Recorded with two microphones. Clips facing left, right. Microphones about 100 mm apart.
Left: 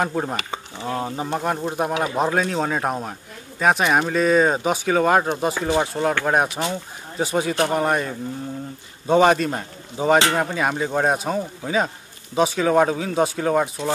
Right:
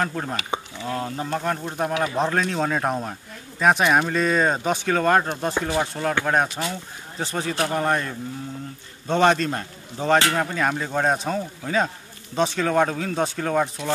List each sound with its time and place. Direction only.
0.0 s speech: 15° left (ahead or behind)
5.7 s speech: 15° left (ahead or behind)